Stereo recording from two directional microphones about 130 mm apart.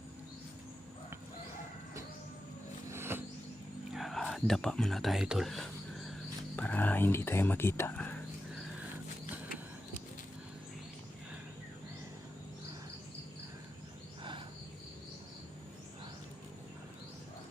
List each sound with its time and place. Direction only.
2.9 s music: 20° right (ahead or behind)
3.9 s speech: centre (ahead or behind)
6.6 s speech: 10° left (ahead or behind)